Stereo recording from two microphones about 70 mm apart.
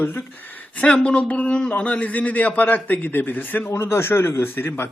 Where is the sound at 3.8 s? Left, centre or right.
Left.